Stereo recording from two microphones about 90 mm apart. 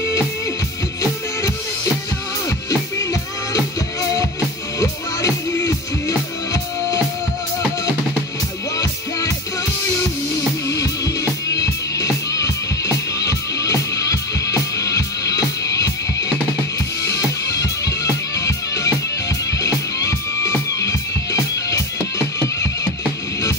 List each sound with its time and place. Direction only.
2.7 s music: 40° left (ahead or behind)
11.4 s music: 40° left (ahead or behind)
20.0 s music: 35° left (ahead or behind)